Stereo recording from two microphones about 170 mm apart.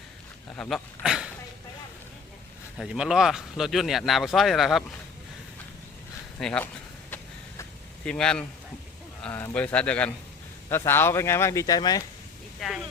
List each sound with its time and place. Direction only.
0.5 s speech: 5° left (ahead or behind)
2.7 s speech: 5° right (ahead or behind)
6.4 s speech: 5° left (ahead or behind)
8.0 s speech: 5° left (ahead or behind); by 12.0 s 20° left (ahead or behind)
12.5 s speech: centre (ahead or behind)